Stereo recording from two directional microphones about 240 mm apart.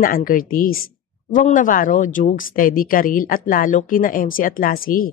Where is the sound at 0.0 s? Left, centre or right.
Left.